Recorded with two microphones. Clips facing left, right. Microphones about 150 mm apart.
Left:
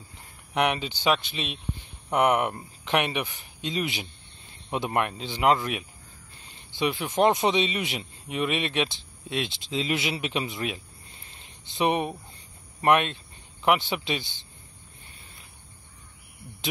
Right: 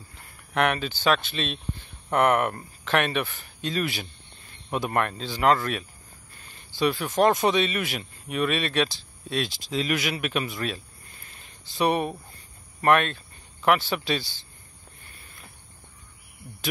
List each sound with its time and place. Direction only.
0.6 s speech: 20° left (ahead or behind)